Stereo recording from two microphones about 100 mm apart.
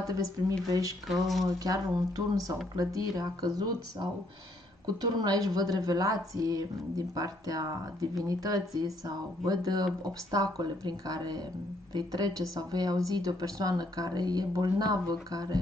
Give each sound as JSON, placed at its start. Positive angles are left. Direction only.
{"t": 0.1, "sound": "speech", "side_deg": -35}
{"t": 1.0, "sound": "speech", "side_deg": 0}
{"t": 1.4, "sound": "speech", "side_deg": -35}